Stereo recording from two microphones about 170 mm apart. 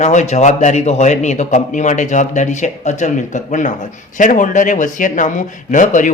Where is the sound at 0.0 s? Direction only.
45° left (ahead or behind).